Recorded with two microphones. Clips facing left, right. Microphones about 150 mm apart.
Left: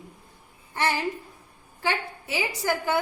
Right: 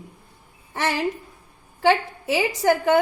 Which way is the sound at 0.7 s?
85° right.